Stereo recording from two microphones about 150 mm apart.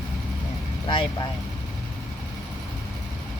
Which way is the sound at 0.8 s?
35° left (ahead or behind).